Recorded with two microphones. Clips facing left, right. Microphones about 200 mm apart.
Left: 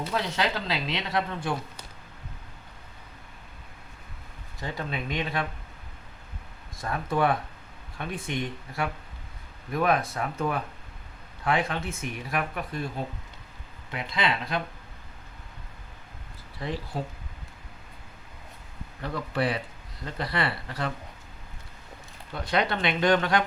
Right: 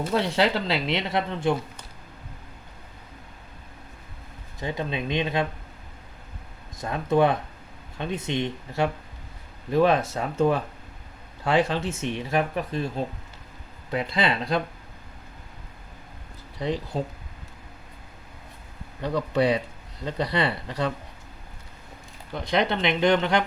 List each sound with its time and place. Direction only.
0.1 s speech: 30° right (ahead or behind)
4.6 s speech: 20° right (ahead or behind)
6.7 s speech: 20° right (ahead or behind)
13.9 s speech: 30° right (ahead or behind)
16.6 s speech: 20° right (ahead or behind)
19.0 s speech: 20° right (ahead or behind)
22.4 s speech: 20° right (ahead or behind)